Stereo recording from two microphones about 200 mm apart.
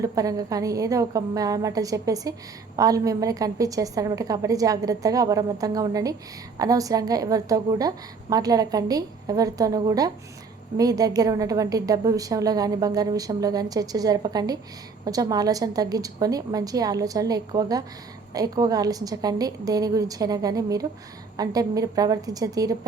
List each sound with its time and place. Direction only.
0.0 s a woman's voice: 15° right (ahead or behind)